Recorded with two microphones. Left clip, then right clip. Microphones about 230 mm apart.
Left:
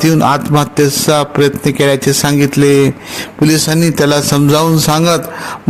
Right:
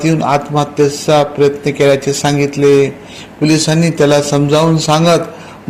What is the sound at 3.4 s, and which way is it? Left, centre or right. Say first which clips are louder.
Speech: even; left.